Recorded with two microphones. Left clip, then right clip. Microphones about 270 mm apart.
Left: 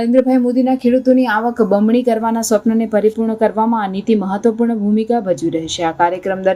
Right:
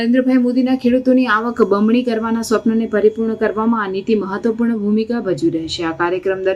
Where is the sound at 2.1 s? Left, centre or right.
Left.